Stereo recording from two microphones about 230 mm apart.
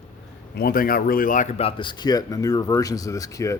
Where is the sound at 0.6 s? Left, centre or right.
Left.